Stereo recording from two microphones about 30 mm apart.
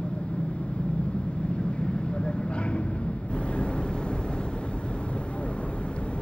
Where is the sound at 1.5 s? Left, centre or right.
Left.